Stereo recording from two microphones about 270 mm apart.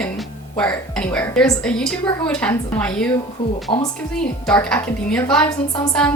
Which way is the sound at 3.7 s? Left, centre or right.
Centre.